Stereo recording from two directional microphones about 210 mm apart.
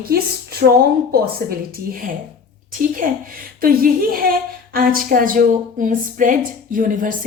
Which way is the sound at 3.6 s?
45° right (ahead or behind).